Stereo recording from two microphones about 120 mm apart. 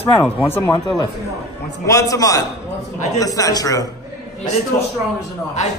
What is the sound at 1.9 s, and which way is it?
Speech, 30° left (ahead or behind).